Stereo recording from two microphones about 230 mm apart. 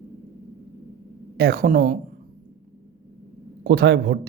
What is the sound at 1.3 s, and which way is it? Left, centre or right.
Speech, right.